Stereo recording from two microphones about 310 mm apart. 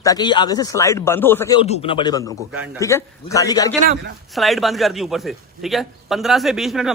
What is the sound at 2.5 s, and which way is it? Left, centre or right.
Speech, centre.